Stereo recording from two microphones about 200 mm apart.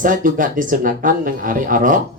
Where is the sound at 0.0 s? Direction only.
40° right (ahead or behind).